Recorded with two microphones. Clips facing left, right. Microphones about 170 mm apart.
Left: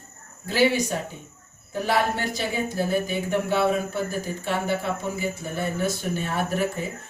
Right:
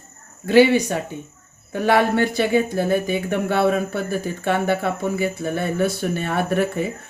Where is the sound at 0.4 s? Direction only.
65° right (ahead or behind).